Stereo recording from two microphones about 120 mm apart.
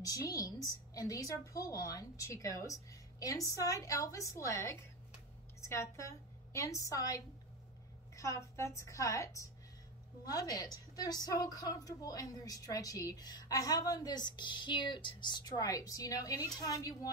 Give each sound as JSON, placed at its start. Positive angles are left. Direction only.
{"t": 0.0, "sound": "a woman's voice", "side_deg": 30}